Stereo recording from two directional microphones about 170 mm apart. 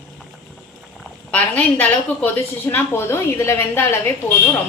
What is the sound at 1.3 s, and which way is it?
A woman's voice, 10° left (ahead or behind).